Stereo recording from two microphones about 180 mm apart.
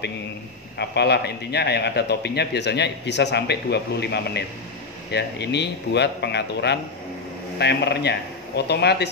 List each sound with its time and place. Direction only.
0.7 s a man's voice: 70° left (ahead or behind)